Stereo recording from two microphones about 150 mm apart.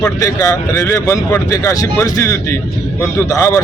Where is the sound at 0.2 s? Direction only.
20° left (ahead or behind).